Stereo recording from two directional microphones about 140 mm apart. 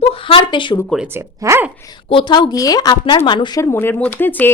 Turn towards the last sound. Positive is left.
turn(degrees=15)  # may be behind; listen again after turning